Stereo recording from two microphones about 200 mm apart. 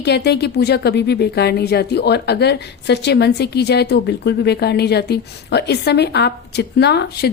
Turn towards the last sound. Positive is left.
turn(degrees=55)  # may be behind; listen again after turning